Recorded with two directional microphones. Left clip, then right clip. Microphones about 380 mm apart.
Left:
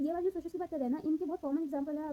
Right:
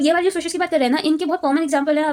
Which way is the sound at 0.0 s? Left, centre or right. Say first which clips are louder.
Right 17 dB; left.